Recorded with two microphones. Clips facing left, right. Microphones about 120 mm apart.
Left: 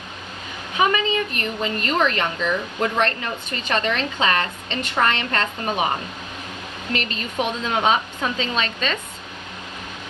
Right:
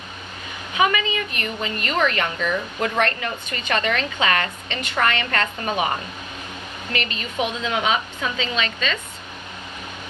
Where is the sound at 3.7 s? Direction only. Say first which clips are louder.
Even; 35° left (ahead or behind).